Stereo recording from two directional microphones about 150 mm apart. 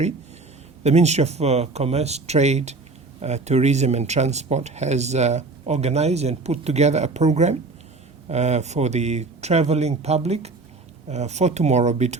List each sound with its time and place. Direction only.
0.9 s speech: 45° right (ahead or behind)